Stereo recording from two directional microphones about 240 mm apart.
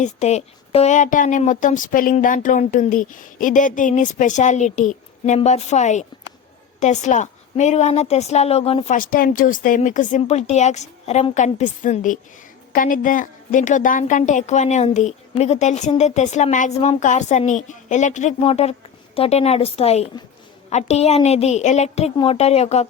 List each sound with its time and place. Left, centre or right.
0.0 s a woman's voice: left